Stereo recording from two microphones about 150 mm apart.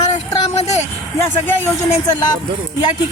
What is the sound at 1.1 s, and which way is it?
Speech, 15° left (ahead or behind).